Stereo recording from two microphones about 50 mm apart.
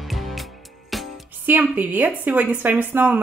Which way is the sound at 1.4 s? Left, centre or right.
Right.